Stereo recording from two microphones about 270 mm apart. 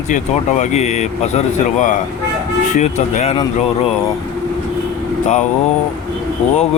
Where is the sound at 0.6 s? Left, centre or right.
Left.